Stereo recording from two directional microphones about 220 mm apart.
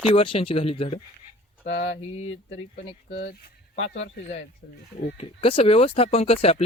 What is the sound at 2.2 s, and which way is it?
Speech, 60° left (ahead or behind).